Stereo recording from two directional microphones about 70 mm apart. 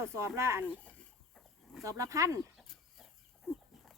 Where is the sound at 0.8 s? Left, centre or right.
Centre.